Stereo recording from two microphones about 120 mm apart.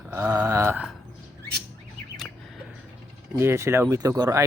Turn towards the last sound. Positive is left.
turn(degrees=-25)  # may be behind; listen again after turning